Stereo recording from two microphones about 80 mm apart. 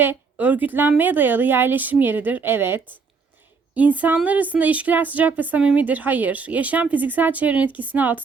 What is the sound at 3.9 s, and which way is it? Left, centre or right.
Speech, right.